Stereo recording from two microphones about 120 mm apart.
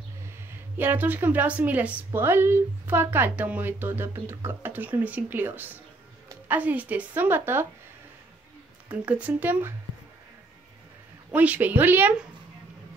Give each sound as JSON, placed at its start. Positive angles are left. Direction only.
{"t": 0.5, "sound": "a woman's voice", "side_deg": -15}
{"t": 8.8, "sound": "a woman's voice", "side_deg": -10}
{"t": 11.3, "sound": "a woman's voice", "side_deg": -15}